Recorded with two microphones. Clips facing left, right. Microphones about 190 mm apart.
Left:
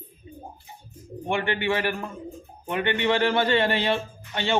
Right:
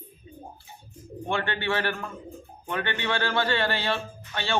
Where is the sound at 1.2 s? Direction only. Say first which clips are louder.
Left 3 dB; 15° left (ahead or behind).